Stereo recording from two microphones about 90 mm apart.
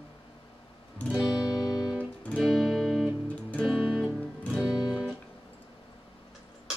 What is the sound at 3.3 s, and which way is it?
Music, 15° left (ahead or behind).